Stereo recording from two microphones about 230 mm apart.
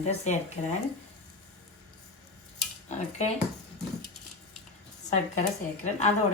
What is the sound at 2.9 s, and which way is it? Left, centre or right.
Speech, left.